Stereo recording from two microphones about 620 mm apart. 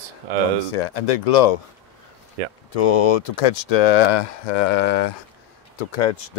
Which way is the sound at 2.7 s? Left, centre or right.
Left.